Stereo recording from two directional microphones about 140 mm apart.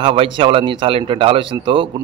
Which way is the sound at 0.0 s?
40° right (ahead or behind).